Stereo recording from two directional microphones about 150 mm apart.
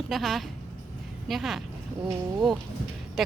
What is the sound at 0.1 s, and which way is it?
A woman's voice, centre (ahead or behind).